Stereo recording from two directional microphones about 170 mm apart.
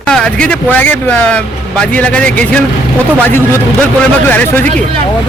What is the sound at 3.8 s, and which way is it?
Speech, 10° left (ahead or behind).